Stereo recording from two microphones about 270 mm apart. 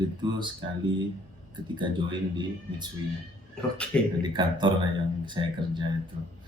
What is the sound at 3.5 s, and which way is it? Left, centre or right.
Speech, centre.